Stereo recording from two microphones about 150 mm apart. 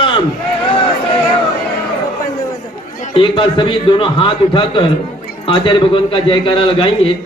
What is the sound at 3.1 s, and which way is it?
A man's voice, 35° left (ahead or behind).